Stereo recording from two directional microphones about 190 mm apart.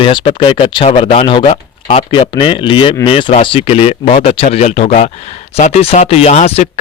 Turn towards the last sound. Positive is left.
turn(degrees=35)  # may be behind; listen again after turning